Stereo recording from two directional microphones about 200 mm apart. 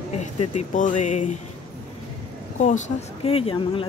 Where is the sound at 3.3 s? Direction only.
30° left (ahead or behind).